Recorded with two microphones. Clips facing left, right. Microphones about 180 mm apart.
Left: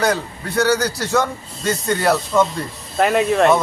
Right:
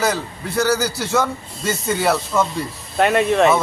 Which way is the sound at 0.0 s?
Centre (ahead or behind).